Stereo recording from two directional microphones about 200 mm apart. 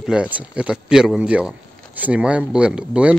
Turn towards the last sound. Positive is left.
turn(degrees=-5)  # may be behind; listen again after turning